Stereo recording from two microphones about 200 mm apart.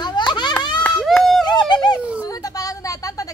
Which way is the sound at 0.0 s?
20° left (ahead or behind).